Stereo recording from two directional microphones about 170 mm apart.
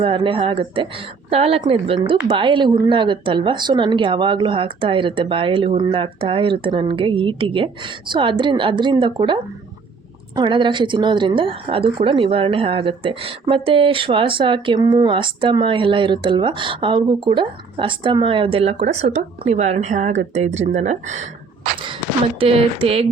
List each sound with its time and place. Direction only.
0.0 s a woman's voice: 30° right (ahead or behind)
22.4 s a woman's voice: 35° right (ahead or behind)